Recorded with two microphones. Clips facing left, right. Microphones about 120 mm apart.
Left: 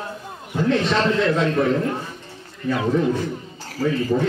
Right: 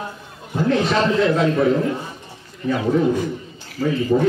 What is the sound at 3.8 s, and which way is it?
Speech, 40° left (ahead or behind).